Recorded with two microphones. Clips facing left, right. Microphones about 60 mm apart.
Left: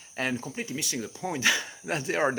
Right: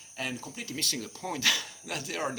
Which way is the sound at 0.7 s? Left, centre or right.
Centre.